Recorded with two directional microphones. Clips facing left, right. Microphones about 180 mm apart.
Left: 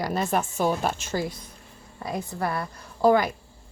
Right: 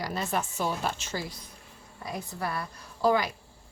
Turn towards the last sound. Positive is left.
turn(degrees=50)  # may be behind; listen again after turning